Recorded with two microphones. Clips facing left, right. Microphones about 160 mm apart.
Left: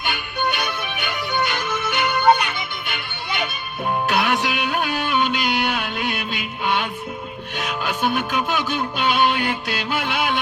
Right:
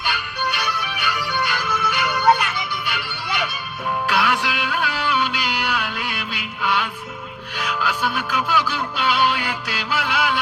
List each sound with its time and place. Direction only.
0.0 s music: 20° left (ahead or behind)